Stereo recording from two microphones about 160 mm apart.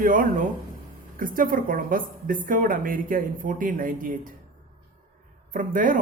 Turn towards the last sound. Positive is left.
turn(degrees=-60)  # may be behind; listen again after turning